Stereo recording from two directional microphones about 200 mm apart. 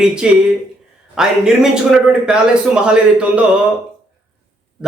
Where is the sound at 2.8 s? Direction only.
5° right (ahead or behind).